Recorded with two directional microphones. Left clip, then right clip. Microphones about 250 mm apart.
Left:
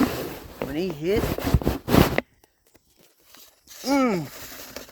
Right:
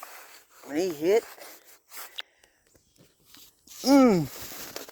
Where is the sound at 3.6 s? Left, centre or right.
Right.